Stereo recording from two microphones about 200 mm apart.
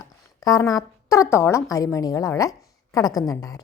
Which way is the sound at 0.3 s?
20° left (ahead or behind).